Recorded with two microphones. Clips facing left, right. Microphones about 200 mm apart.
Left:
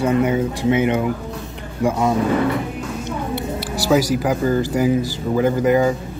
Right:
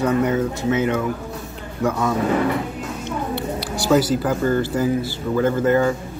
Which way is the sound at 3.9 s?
10° left (ahead or behind).